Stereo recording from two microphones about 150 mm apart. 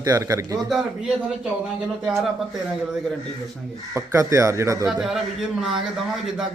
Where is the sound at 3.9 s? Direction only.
20° right (ahead or behind).